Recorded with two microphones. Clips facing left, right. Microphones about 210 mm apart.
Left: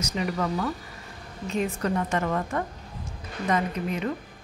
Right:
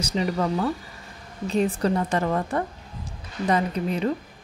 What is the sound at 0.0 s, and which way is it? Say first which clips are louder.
A woman's voice: right 3 dB; 30° right (ahead or behind).